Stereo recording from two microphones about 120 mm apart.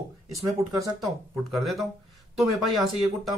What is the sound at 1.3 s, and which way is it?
Speech, centre (ahead or behind).